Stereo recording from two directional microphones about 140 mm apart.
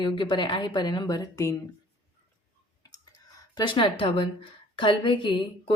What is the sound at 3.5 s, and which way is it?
A woman's voice, 35° left (ahead or behind).